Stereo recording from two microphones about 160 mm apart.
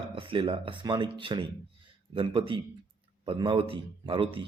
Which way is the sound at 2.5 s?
30° right (ahead or behind).